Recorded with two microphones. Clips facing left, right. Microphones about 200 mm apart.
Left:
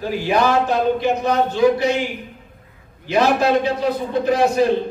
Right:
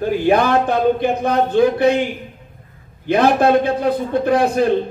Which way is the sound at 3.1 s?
55° right (ahead or behind).